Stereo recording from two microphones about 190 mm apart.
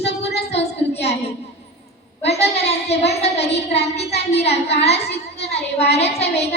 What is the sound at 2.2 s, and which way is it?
A woman's voice, 35° left (ahead or behind).